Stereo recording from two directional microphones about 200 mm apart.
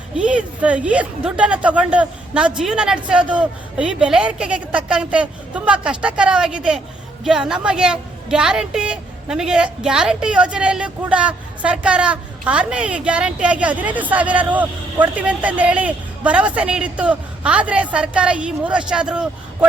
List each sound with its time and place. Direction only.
0.2 s a woman's voice: 5° right (ahead or behind)